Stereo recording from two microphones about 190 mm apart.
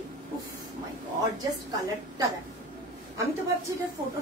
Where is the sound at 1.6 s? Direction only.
20° right (ahead or behind).